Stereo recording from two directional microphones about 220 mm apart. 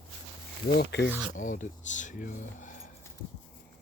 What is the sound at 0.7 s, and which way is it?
Speech, 50° left (ahead or behind).